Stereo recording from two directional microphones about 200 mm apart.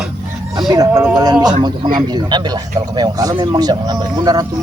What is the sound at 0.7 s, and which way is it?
A man's voice, 20° right (ahead or behind).